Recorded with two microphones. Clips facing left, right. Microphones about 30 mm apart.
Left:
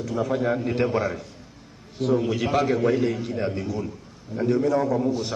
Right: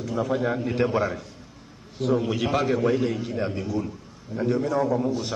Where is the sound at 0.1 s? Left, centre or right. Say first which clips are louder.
Left 1 dB; centre.